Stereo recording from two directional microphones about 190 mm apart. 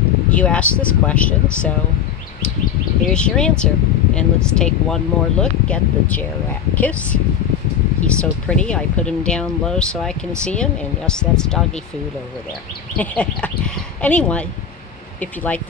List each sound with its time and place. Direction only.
0.3 s speech: 5° left (ahead or behind)
3.1 s speech: 5° left (ahead or behind)
12.9 s speech: 5° left (ahead or behind)